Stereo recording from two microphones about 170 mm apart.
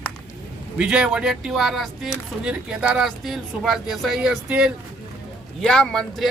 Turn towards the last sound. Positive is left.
turn(degrees=5)  # may be behind; listen again after turning